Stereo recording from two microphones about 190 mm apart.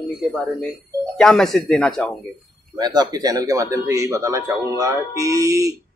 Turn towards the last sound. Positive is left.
turn(degrees=-15)  # may be behind; listen again after turning